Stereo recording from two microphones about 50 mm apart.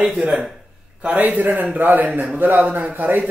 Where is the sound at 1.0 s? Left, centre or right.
Right.